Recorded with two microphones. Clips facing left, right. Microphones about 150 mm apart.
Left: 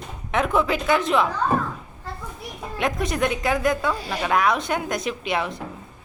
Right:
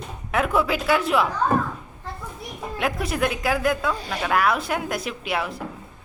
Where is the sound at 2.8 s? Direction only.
5° right (ahead or behind).